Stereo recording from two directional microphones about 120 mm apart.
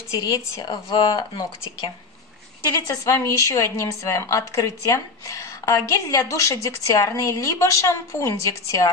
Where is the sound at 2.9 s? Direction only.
25° left (ahead or behind).